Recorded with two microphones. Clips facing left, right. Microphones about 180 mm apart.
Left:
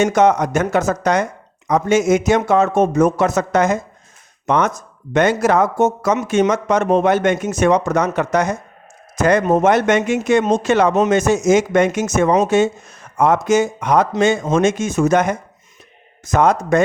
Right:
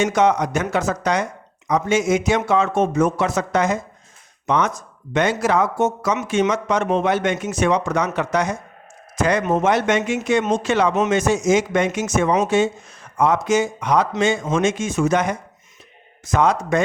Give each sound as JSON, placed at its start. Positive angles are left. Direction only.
{"t": 0.0, "sound": "speech", "side_deg": 45}